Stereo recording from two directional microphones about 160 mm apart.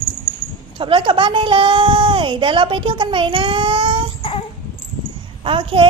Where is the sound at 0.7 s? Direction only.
30° right (ahead or behind).